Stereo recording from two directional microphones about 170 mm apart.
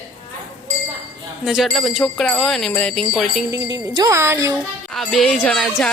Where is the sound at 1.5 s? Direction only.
Centre (ahead or behind).